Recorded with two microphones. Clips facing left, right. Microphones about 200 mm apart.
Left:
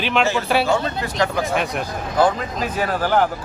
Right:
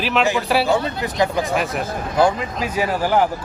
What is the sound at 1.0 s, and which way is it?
Speech, 20° right (ahead or behind).